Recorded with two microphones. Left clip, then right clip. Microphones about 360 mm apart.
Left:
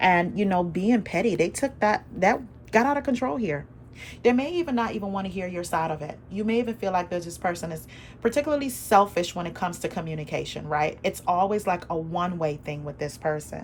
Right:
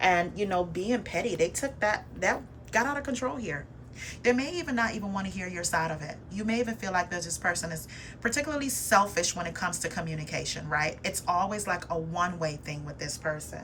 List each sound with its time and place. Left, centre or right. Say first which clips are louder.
0.0 s a woman's voice: left 4 dB; left